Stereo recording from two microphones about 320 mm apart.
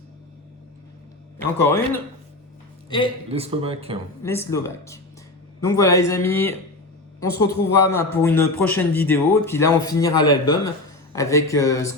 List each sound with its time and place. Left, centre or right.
1.5 s a man's voice: centre
3.2 s speech: centre
4.2 s a man's voice: centre